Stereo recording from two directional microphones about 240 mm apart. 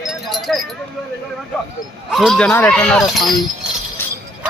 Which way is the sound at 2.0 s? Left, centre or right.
Centre.